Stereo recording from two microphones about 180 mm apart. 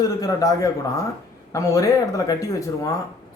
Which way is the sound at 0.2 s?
20° left (ahead or behind).